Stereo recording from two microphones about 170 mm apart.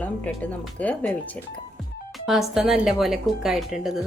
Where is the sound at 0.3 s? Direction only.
10° left (ahead or behind).